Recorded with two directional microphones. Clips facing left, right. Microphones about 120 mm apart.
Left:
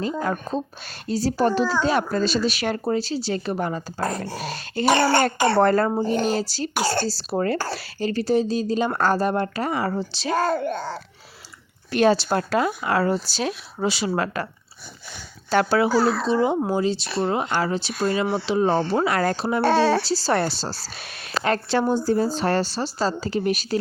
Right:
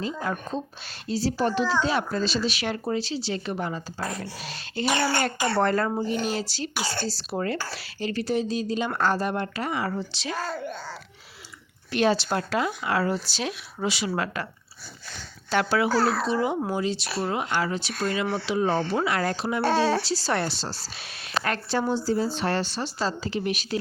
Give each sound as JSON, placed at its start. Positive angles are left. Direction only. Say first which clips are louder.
{"t": 0.0, "sound": "speech", "louder": "left 4 dB", "side_deg": 50}
{"t": 5.5, "sound": "speech", "louder": "left 4 dB", "side_deg": 40}
{"t": 10.3, "sound": "a child's voice", "louder": "left 10 dB", "side_deg": 55}
{"t": 11.9, "sound": "speech", "louder": "left 4 dB", "side_deg": 45}
{"t": 15.4, "sound": "a child's voice", "louder": "left 4 dB", "side_deg": 35}
{"t": 15.9, "sound": "a child's voice", "louder": "left 3 dB", "side_deg": 0}
{"t": 16.3, "sound": "speech", "louder": "left 5 dB", "side_deg": 25}
{"t": 19.6, "sound": "speech", "louder": "left 4 dB", "side_deg": 70}
{"t": 20.1, "sound": "speech", "louder": "left 4 dB", "side_deg": 35}
{"t": 21.8, "sound": "speech", "louder": "left 4 dB", "side_deg": 50}
{"t": 22.3, "sound": "speech", "louder": "left 4 dB", "side_deg": 40}